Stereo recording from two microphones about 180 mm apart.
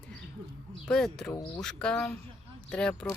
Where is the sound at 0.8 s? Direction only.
5° left (ahead or behind).